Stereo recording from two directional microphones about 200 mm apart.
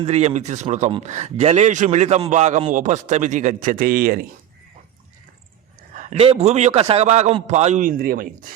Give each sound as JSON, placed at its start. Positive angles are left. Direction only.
{"t": 0.0, "sound": "speech", "side_deg": -35}
{"t": 6.0, "sound": "speech", "side_deg": -35}